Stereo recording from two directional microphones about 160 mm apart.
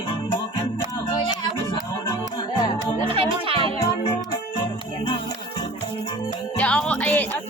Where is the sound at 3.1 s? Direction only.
35° right (ahead or behind).